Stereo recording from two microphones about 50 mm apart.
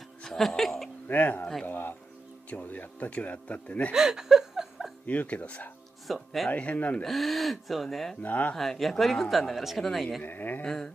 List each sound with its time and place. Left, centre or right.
0.2 s music: centre
1.0 s speech: left
1.7 s speech: left
2.5 s speech: left
3.9 s a sound: centre
5.0 s speech: left
6.0 s speech: centre
6.5 s speech: left
7.1 s speech: centre
8.2 s speech: left
8.5 s speech: centre
10.2 s speech: left
10.6 s a sound: centre